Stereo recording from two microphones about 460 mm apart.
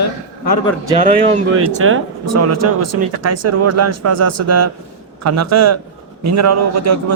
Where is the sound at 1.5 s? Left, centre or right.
Right.